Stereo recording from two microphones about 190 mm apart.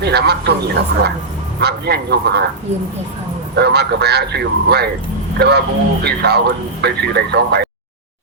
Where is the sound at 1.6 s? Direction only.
60° right (ahead or behind).